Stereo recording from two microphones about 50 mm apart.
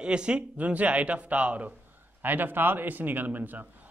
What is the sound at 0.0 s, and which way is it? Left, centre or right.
Speech, centre.